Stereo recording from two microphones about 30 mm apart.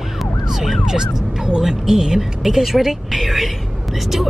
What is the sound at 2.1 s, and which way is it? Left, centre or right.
Speech, centre.